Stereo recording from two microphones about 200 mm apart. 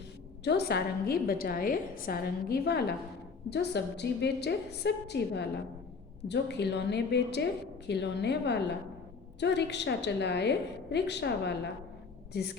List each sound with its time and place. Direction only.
0.4 s a woman's voice: 55° left (ahead or behind)